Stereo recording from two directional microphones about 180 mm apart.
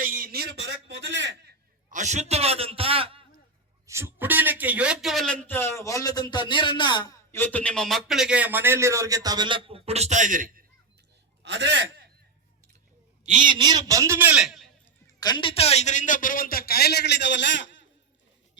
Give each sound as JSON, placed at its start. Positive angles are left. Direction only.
{"t": 0.0, "sound": "a sound", "side_deg": -55}
{"t": 1.9, "sound": "a man's voice", "side_deg": -40}
{"t": 3.8, "sound": "a man's voice", "side_deg": -15}
{"t": 7.3, "sound": "a man's voice", "side_deg": 10}
{"t": 11.4, "sound": "a man's voice", "side_deg": -75}
{"t": 13.4, "sound": "a man's voice", "side_deg": -25}
{"t": 15.0, "sound": "a man's voice", "side_deg": 25}